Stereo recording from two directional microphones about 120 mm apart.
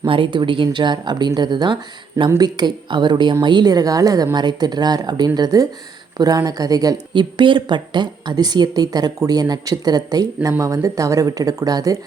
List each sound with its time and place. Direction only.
0.0 s speech: 45° right (ahead or behind)